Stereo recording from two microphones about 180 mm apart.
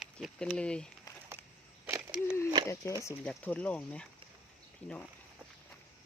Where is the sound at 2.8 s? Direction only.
15° left (ahead or behind).